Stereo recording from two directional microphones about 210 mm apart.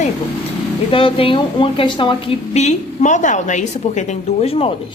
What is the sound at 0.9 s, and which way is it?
A woman's voice, 25° left (ahead or behind).